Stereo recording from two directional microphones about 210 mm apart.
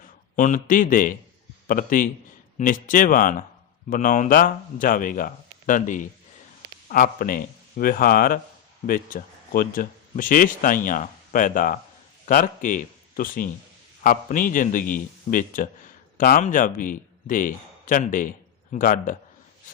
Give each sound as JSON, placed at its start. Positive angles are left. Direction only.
{"t": 0.0, "sound": "a man's voice", "side_deg": 40}